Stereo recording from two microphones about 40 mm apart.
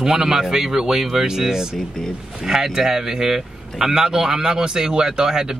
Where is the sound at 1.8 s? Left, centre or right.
Centre.